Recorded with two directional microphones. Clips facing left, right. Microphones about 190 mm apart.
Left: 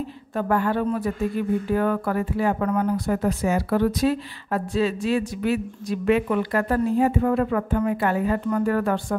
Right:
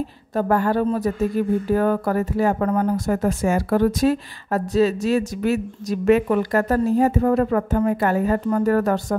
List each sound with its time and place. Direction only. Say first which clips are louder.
0.3 s speech: right 3 dB; 40° right (ahead or behind)